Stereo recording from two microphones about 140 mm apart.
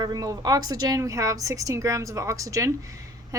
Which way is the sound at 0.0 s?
25° right (ahead or behind).